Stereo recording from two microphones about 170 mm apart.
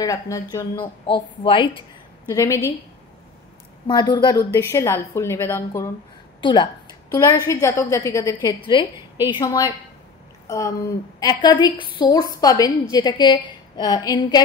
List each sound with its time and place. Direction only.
0.0 s a woman's voice: 20° left (ahead or behind)
3.8 s a woman's voice: 25° left (ahead or behind)
6.4 s a woman's voice: 30° left (ahead or behind)